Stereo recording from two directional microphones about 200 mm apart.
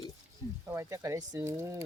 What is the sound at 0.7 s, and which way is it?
Speech, 15° right (ahead or behind).